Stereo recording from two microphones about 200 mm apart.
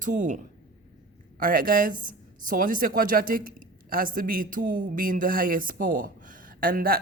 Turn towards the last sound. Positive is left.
turn(degrees=-45)  # may be behind; listen again after turning